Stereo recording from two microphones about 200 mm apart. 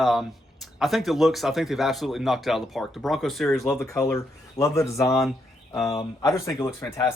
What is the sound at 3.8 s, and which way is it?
Speech, 15° left (ahead or behind).